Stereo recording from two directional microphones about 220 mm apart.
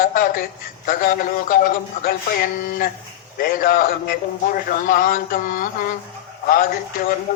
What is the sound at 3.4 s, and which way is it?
Speech, 40° left (ahead or behind).